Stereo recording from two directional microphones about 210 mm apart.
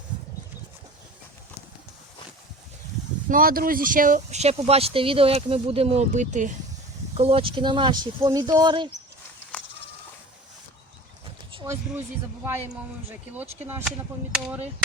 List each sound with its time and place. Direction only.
3.2 s speech: 40° right (ahead or behind); by 8.9 s 20° right (ahead or behind)
9.5 s a sound: 10° left (ahead or behind)
11.5 s speech: 15° right (ahead or behind)
13.1 s speech: 10° right (ahead or behind)